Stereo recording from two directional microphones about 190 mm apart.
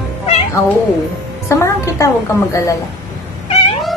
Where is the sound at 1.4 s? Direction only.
15° left (ahead or behind).